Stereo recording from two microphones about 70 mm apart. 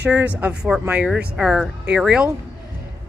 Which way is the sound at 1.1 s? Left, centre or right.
Centre.